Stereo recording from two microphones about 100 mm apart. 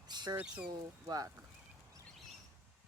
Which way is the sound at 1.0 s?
40° right (ahead or behind).